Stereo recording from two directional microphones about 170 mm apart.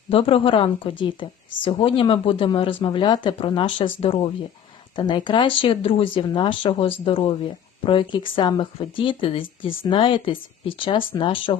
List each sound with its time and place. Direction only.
0.1 s speech: 35° left (ahead or behind)